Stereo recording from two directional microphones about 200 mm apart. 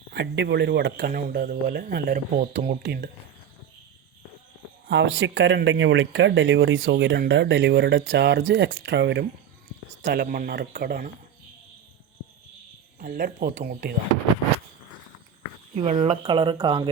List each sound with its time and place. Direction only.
0.1 s speech: 60° right (ahead or behind)
4.9 s speech: 60° right (ahead or behind)
13.0 s speech: 50° right (ahead or behind)
15.8 s speech: 30° right (ahead or behind)